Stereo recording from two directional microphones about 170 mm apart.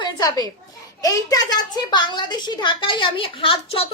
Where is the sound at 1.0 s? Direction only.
20° left (ahead or behind).